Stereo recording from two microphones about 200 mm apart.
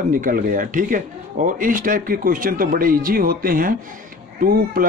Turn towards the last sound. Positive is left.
turn(degrees=-45)  # may be behind; listen again after turning